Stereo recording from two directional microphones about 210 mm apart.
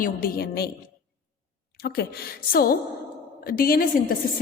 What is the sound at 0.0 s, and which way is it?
Speech, 45° left (ahead or behind).